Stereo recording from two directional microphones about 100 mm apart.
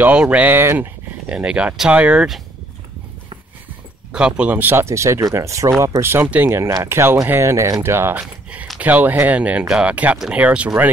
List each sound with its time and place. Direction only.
0.0 s speech: 15° right (ahead or behind)
1.3 s speech: 10° right (ahead or behind)
4.1 s speech: 10° right (ahead or behind); by 8.2 s 25° right (ahead or behind)
8.2 s speech: 10° right (ahead or behind)